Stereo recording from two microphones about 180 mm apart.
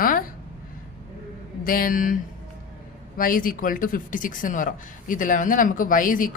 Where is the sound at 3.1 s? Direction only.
50° left (ahead or behind).